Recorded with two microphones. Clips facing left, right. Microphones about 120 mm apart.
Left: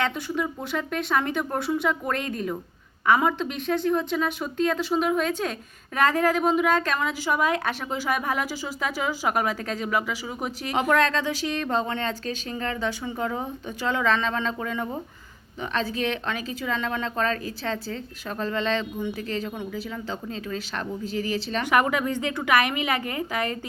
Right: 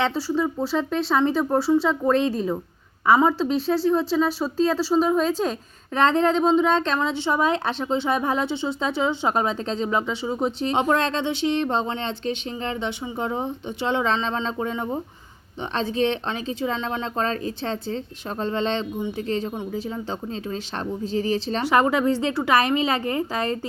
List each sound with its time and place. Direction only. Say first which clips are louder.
0.0 s speech: right 4 dB; 30° right (ahead or behind)